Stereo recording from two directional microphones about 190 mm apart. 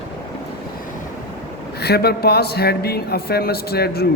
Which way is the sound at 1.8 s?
55° left (ahead or behind).